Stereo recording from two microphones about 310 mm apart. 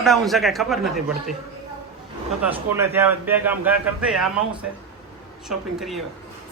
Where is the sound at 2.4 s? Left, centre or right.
Centre.